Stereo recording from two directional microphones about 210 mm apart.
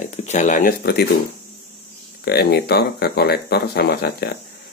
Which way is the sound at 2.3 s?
50° left (ahead or behind).